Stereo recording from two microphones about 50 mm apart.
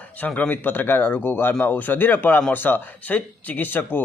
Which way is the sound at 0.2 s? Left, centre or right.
Left.